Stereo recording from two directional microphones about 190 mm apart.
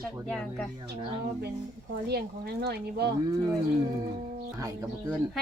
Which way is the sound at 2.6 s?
60° right (ahead or behind).